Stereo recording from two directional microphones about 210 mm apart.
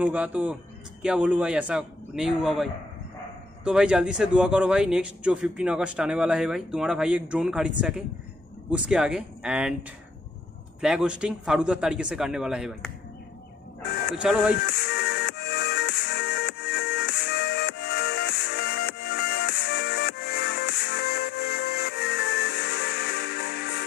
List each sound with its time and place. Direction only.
0.0 s a man's voice: 5° right (ahead or behind)
10.8 s a man's voice: 5° right (ahead or behind)
14.1 s a man's voice: 5° right (ahead or behind)
14.7 s music: 55° left (ahead or behind)